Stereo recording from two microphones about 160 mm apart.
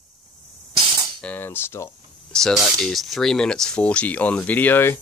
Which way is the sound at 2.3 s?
5° left (ahead or behind).